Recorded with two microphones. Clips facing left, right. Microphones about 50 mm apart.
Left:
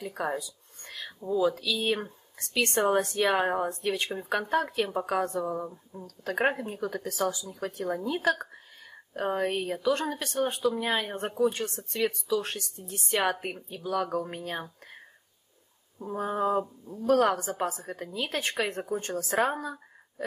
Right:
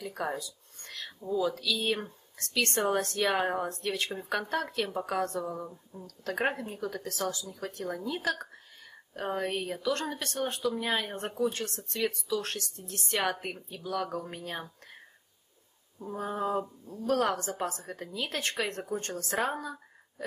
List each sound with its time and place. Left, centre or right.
0.0 s a woman's voice: centre